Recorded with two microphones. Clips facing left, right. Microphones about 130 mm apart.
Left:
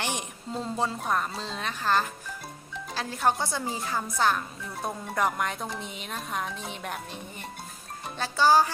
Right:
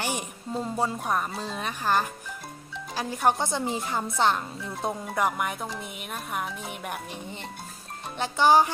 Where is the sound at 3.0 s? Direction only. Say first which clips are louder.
Right 2 dB; 15° right (ahead or behind).